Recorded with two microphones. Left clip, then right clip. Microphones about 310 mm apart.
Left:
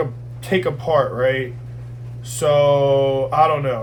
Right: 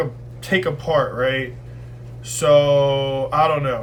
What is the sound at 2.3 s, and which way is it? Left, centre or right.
Speech, centre.